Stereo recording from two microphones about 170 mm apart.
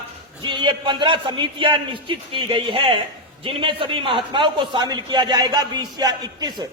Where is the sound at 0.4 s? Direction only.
25° right (ahead or behind).